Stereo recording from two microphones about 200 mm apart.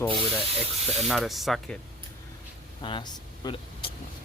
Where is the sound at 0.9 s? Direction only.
Centre (ahead or behind).